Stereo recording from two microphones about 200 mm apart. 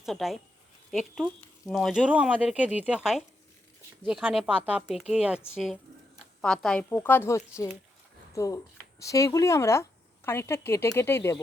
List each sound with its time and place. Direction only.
0.0 s speech: centre (ahead or behind)